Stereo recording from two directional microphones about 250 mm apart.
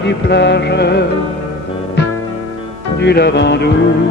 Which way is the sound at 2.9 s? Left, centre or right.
Left.